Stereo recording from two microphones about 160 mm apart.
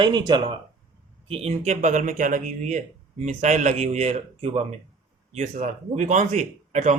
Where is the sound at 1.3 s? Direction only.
40° right (ahead or behind).